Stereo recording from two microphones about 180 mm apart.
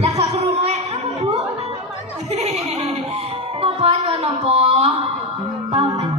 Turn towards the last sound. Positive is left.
turn(degrees=-35)  # may be behind; listen again after turning